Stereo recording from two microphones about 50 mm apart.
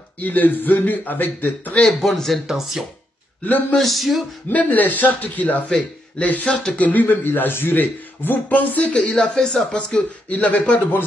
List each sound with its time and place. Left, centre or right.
0.2 s a man's voice: left
1.8 s speech: centre
2.4 s speech: centre
4.5 s a man's voice: left
9.1 s speech: centre
10.3 s a man's voice: left